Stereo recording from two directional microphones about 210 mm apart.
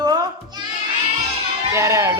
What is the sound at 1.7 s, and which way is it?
Speech, 15° right (ahead or behind).